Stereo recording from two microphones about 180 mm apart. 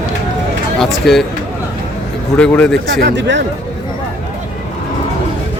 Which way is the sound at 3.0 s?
75° right (ahead or behind).